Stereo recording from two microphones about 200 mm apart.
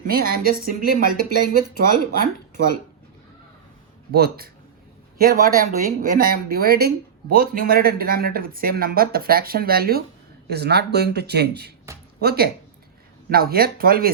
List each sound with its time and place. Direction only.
0.0 s speech: 45° right (ahead or behind)
1.3 s speech: 50° left (ahead or behind)
4.1 s speech: 50° right (ahead or behind)